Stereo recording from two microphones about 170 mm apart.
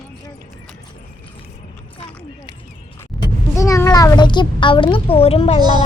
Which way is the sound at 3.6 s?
20° left (ahead or behind).